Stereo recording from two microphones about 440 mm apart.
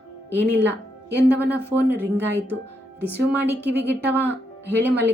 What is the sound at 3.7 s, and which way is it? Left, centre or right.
Speech, right.